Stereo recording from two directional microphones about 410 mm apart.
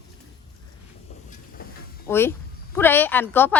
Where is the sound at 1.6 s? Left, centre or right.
Left.